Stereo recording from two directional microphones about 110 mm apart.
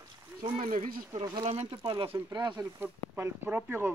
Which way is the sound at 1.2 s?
45° right (ahead or behind).